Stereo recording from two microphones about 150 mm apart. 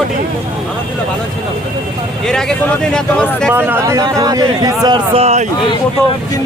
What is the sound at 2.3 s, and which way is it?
Speech, 5° left (ahead or behind).